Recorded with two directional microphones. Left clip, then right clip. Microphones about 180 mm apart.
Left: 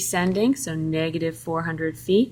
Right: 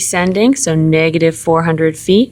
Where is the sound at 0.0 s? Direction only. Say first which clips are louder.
Right 9 dB; 25° right (ahead or behind).